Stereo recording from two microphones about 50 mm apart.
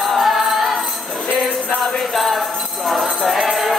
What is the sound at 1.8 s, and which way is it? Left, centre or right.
Jingle bell, centre.